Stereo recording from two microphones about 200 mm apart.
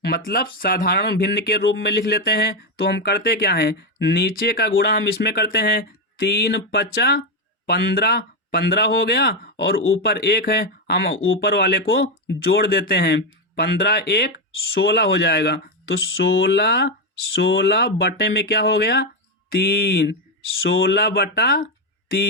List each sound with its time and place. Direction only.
0.3 s speech: 45° left (ahead or behind); by 11.4 s 70° left (ahead or behind)
11.4 s speech: 55° left (ahead or behind)